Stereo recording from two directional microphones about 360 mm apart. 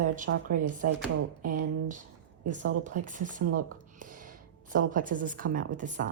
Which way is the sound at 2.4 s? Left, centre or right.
Centre.